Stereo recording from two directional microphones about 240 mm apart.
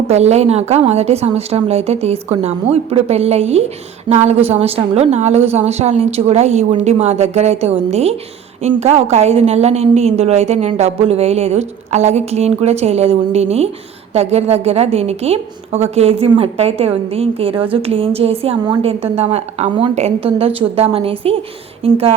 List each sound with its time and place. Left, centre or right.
0.1 s a woman's voice: right